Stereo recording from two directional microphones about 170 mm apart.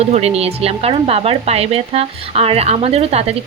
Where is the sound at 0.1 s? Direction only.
40° right (ahead or behind).